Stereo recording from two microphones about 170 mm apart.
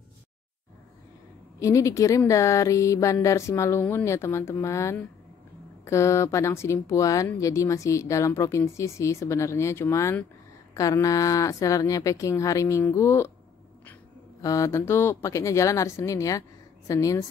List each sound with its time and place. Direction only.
1.6 s speech: 20° left (ahead or behind)
14.4 s speech: 20° left (ahead or behind)